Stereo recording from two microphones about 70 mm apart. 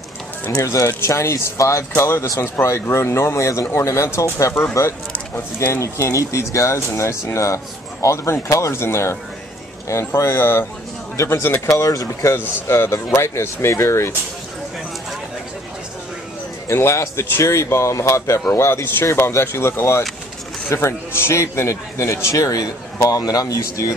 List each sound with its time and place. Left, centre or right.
0.5 s speech: left
11.2 s speech: left
12.3 s speech: left
12.7 s speech: left
16.6 s speech: left